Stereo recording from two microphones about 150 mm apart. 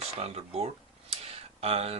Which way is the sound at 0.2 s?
40° right (ahead or behind).